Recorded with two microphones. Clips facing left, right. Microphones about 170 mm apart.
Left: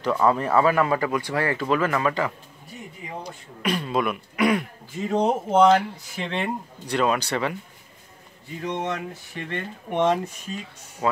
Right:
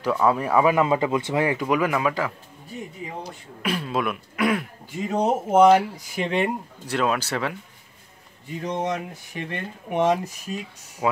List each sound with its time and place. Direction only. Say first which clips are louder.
0.0 s speech: even; 5° right (ahead or behind)
3.6 s speech: left 1 dB; 5° right (ahead or behind)
8.6 s speech: right 1 dB; 15° right (ahead or behind)